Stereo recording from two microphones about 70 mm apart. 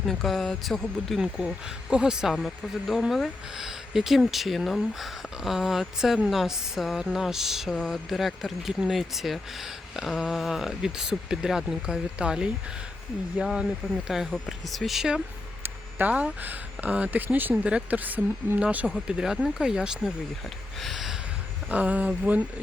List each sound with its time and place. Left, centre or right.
0.0 s speech: centre
1.2 s speech: centre
2.3 s speech: centre
14.7 s speech: centre
15.6 s a sound: right
16.1 s speech: right
19.0 s speech: centre
20.8 s a sound: centre
21.7 s speech: right